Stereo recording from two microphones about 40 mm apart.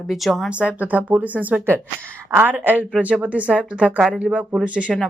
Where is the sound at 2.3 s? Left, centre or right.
Right.